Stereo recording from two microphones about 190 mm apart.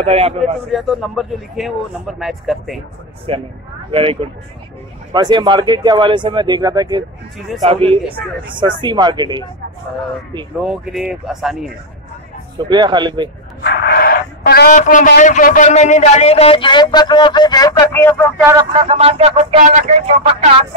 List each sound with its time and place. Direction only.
0.0 s speech: 30° right (ahead or behind)
0.4 s a man's voice: centre (ahead or behind)
3.3 s speech: 30° right (ahead or behind)
7.3 s a man's voice: centre (ahead or behind)
7.6 s speech: 30° right (ahead or behind)
10.6 s a man's voice: 5° right (ahead or behind)
12.5 s speech: 25° right (ahead or behind)
13.6 s speech: 55° left (ahead or behind); by 18.1 s 15° left (ahead or behind)
18.7 s speech: 30° right (ahead or behind)